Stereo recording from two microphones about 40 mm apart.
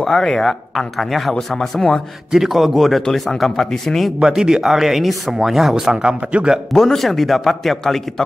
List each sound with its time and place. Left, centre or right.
0.0 s speech: centre
2.3 s speech: centre
4.3 s speech: centre
5.9 s speech: right
6.7 s speech: centre